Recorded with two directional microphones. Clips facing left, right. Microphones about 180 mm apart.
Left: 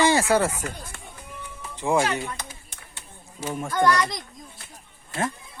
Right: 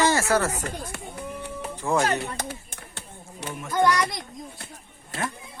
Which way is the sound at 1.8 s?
15° left (ahead or behind).